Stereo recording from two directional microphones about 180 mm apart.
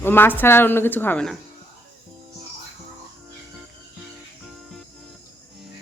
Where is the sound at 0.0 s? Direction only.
10° left (ahead or behind).